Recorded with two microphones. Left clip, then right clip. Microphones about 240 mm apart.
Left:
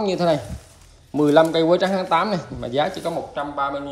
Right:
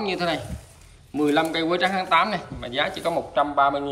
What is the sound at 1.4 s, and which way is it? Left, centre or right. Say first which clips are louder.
Speech: left 5 dB; centre.